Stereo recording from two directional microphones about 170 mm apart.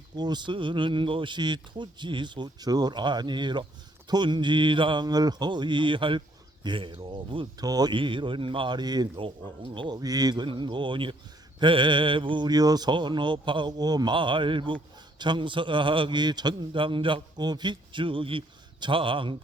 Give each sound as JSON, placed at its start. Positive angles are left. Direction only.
{"t": 0.2, "sound": "speech", "side_deg": -25}